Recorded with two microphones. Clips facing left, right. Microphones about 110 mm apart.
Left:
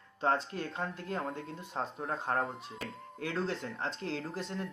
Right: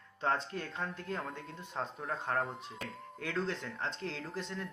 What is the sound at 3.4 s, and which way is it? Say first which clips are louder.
Speech: left 2 dB; 35° left (ahead or behind).